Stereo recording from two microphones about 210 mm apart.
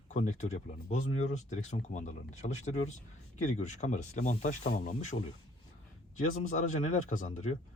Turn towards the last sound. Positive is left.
turn(degrees=35)  # may be behind; listen again after turning